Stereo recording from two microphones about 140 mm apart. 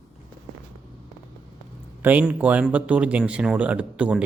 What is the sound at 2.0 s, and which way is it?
Speech, 10° right (ahead or behind).